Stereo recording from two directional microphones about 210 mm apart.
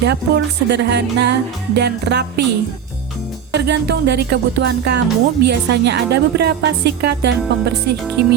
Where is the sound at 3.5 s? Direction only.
55° right (ahead or behind).